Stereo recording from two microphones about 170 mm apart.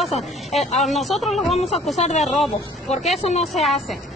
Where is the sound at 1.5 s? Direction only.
40° left (ahead or behind).